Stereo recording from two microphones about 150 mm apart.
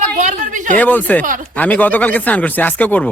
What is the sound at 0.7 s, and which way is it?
Speech, 10° left (ahead or behind).